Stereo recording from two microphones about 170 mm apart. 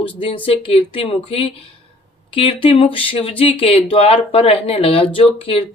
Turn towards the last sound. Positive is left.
turn(degrees=35)  # may be behind; listen again after turning